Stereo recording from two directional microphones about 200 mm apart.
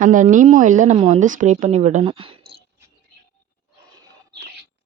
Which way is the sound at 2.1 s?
25° right (ahead or behind).